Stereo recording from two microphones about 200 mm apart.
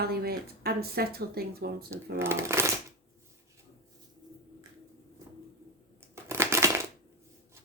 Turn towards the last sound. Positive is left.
turn(degrees=-15)  # may be behind; listen again after turning